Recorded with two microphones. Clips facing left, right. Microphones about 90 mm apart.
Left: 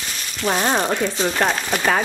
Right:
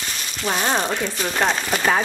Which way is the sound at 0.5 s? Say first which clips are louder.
Left 2 dB; 5° left (ahead or behind).